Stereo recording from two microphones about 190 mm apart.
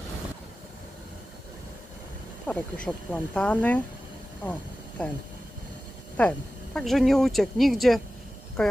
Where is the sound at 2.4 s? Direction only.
5° left (ahead or behind).